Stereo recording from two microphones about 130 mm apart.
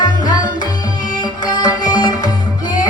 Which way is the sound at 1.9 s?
30° left (ahead or behind).